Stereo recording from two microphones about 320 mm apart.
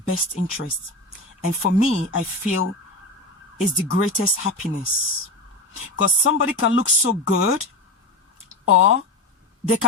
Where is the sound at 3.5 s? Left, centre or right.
Left.